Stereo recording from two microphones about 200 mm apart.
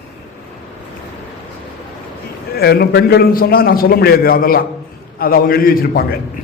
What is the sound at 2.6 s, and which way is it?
A man's voice, 55° left (ahead or behind).